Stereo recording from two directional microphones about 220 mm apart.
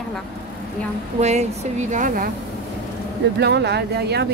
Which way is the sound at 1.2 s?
30° right (ahead or behind).